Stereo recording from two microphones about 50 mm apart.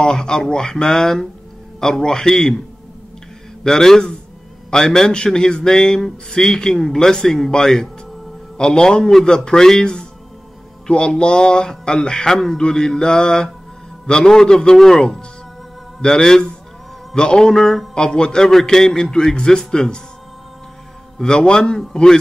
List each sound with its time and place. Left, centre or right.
0.0 s a man's voice: centre
3.6 s a man's voice: centre
21.2 s a man's voice: centre